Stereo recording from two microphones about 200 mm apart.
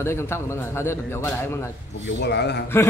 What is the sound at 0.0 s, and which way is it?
A man's voice, 10° left (ahead or behind).